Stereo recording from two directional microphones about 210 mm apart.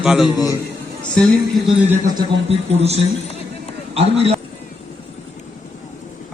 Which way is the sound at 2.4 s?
30° right (ahead or behind).